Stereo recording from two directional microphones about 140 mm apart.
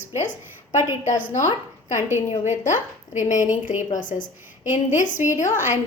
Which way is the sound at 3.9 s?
65° left (ahead or behind).